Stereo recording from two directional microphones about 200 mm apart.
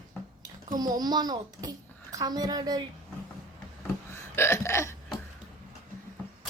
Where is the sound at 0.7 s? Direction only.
20° right (ahead or behind).